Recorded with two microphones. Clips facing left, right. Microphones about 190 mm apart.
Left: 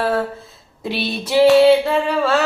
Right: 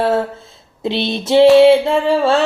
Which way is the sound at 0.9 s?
25° right (ahead or behind).